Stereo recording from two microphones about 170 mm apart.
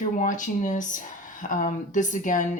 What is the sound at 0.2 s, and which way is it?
Speech, 50° left (ahead or behind).